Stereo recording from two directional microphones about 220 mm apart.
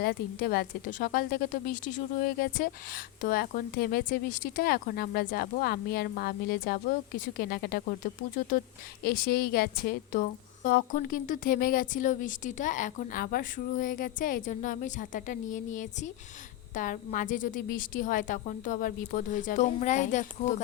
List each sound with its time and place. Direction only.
0.0 s a woman's voice: 45° left (ahead or behind)
9.0 s a woman's voice: 45° left (ahead or behind)